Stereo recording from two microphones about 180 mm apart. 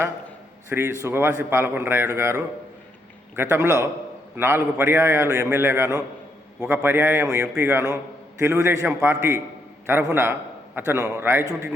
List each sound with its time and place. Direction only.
0.7 s a man's voice: 15° right (ahead or behind)